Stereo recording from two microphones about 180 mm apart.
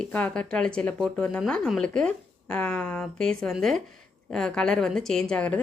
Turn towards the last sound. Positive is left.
turn(degrees=5)  # may be behind; listen again after turning